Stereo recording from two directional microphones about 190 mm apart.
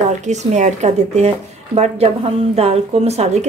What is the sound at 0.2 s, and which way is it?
A woman's voice, 35° right (ahead or behind).